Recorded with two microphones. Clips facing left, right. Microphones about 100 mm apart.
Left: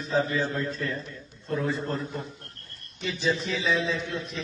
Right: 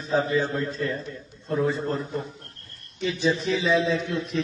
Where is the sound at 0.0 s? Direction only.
35° right (ahead or behind).